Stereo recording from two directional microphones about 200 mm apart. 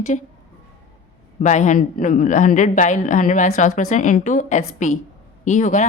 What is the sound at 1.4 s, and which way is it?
Speech, 35° left (ahead or behind).